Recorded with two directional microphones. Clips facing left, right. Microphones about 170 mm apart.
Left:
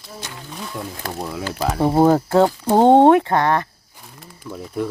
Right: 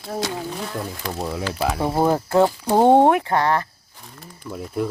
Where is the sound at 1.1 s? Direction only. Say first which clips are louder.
Right 2 dB; centre (ahead or behind).